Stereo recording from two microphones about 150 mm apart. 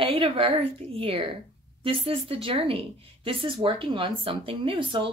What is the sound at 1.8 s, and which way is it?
A woman's voice, 40° right (ahead or behind).